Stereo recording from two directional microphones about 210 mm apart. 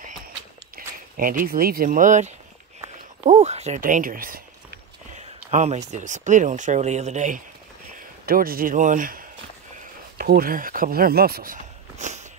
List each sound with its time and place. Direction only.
0.7 s speech: 45° right (ahead or behind)